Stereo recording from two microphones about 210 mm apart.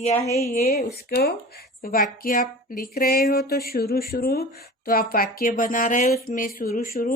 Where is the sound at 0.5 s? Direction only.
45° left (ahead or behind).